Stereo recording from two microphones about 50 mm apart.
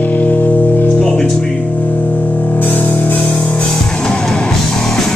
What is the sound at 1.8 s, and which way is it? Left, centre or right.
Music, left.